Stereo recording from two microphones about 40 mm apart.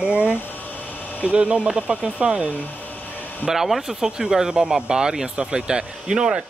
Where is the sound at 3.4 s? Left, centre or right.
Centre.